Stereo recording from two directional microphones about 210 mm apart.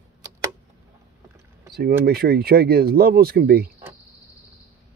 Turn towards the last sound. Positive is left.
turn(degrees=-45)  # may be behind; listen again after turning